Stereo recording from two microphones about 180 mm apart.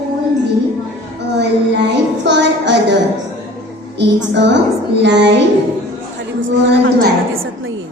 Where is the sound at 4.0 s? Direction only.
75° right (ahead or behind).